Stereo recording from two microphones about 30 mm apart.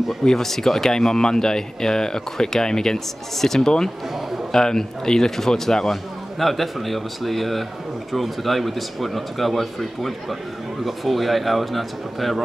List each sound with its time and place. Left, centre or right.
0.2 s speech: centre
3.3 s speech: centre
6.4 s speech: centre